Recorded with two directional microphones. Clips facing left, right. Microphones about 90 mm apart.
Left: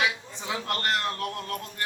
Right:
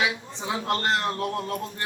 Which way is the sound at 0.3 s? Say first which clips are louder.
Right 4 dB; 25° right (ahead or behind).